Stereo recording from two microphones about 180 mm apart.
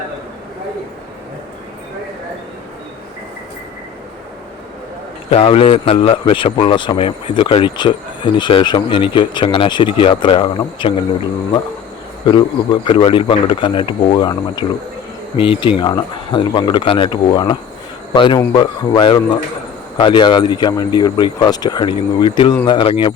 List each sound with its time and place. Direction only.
5.3 s a man's voice: 30° left (ahead or behind)
12.2 s a man's voice: 25° left (ahead or behind)